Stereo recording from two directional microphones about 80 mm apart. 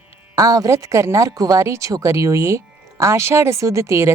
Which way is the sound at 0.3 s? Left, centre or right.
Right.